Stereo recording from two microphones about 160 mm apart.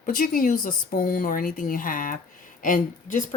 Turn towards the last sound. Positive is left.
turn(degrees=50)  # may be behind; listen again after turning